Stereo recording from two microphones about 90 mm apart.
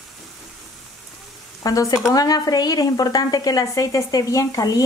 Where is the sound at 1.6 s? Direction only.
40° left (ahead or behind).